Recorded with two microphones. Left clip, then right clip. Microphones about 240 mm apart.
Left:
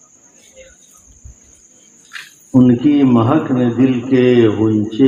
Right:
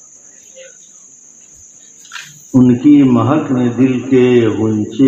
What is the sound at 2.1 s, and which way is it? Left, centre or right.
Cricket, centre.